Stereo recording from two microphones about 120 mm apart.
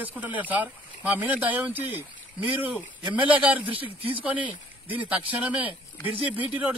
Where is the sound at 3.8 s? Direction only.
50° right (ahead or behind).